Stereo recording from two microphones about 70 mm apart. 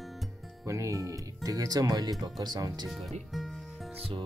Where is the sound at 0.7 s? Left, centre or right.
Right.